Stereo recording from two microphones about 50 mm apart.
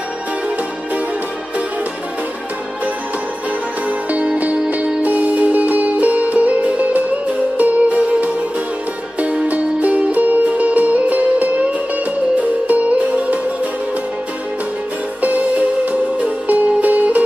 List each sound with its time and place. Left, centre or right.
4.1 s music: right
12.6 s music: right
15.2 s music: right